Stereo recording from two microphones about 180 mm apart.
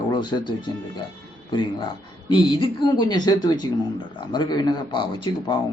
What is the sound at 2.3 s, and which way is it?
Speech, 25° left (ahead or behind).